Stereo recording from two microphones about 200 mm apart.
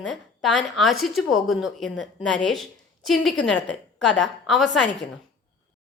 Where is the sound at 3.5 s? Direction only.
70° left (ahead or behind).